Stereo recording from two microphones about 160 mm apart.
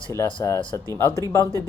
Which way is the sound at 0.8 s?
20° right (ahead or behind).